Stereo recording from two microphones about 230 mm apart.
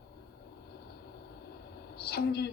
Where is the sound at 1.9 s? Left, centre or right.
Left.